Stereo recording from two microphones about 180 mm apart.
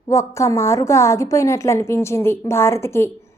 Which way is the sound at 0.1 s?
15° left (ahead or behind).